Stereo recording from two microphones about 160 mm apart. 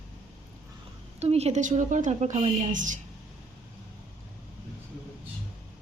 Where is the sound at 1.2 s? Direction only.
40° right (ahead or behind).